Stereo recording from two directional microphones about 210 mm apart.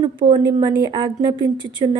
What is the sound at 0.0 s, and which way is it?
Speech, 20° right (ahead or behind).